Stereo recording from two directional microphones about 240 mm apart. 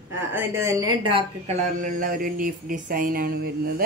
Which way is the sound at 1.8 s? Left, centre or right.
Right.